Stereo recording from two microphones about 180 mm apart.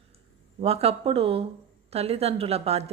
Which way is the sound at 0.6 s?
35° right (ahead or behind).